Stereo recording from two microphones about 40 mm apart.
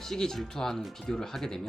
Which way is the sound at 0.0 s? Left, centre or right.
Centre.